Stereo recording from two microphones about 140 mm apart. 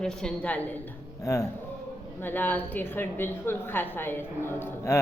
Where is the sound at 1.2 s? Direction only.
20° left (ahead or behind).